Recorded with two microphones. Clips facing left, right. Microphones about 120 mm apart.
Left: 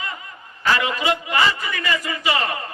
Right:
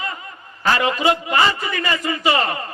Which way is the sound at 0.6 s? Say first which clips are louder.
Right 3 dB; 35° right (ahead or behind).